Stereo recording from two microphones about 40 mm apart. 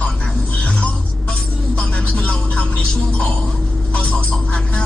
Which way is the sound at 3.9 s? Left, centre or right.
Left.